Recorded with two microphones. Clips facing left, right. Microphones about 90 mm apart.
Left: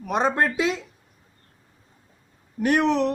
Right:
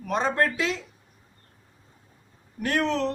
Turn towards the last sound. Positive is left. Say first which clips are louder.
# left 5 dB
turn(degrees=15)  # may be behind; listen again after turning